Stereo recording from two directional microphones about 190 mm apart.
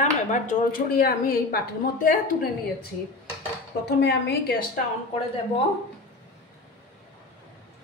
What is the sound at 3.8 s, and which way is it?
A woman's voice, 60° left (ahead or behind).